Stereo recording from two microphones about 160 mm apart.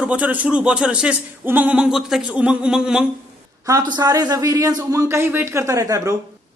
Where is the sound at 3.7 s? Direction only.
25° right (ahead or behind).